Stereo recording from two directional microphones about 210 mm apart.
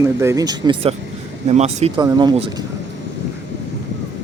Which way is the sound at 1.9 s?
20° right (ahead or behind).